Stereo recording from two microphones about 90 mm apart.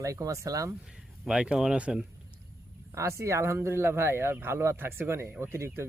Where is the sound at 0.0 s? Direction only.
35° right (ahead or behind).